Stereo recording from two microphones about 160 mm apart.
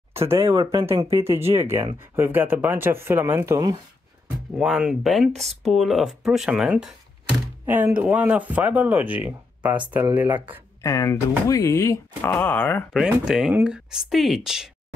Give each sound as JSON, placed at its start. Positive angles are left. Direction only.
{"t": 0.3, "sound": "speech", "side_deg": -20}
{"t": 4.6, "sound": "speech", "side_deg": -5}
{"t": 10.8, "sound": "speech", "side_deg": 20}
{"t": 12.9, "sound": "speech", "side_deg": -5}